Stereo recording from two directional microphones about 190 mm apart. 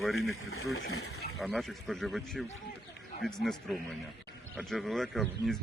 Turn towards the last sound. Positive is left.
turn(degrees=0)  # may be behind; listen again after turning